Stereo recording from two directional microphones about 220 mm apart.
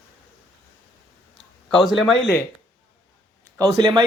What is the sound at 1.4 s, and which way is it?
Speech, centre (ahead or behind).